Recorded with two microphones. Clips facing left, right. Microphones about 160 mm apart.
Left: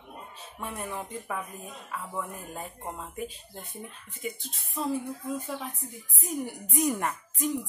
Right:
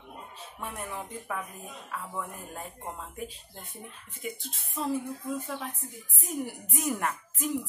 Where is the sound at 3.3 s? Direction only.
Centre (ahead or behind).